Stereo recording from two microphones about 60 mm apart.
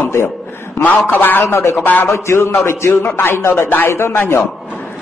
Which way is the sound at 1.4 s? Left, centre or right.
Left.